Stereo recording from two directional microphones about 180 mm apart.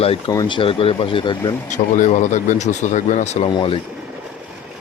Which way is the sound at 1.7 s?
45° left (ahead or behind).